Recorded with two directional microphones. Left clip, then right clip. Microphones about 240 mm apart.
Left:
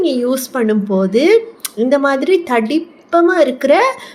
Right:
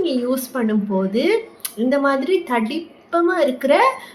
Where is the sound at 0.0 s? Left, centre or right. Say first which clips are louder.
Left 5 dB; left.